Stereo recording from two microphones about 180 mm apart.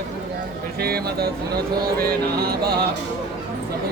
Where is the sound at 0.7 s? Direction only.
60° right (ahead or behind).